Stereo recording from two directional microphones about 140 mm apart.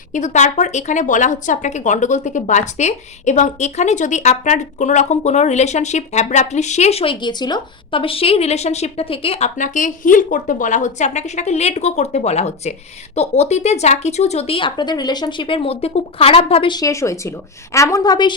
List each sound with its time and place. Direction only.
0.1 s speech: 60° left (ahead or behind); by 9.5 s 45° left (ahead or behind)
9.6 s speech: 65° left (ahead or behind); by 18.3 s 30° left (ahead or behind)